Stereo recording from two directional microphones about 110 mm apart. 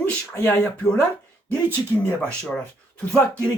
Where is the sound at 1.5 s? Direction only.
20° right (ahead or behind).